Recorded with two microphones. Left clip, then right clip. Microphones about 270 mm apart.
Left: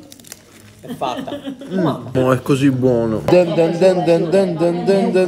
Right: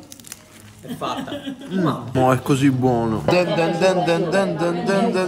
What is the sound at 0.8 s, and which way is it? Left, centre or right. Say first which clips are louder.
A man's voice: left 4 dB; centre.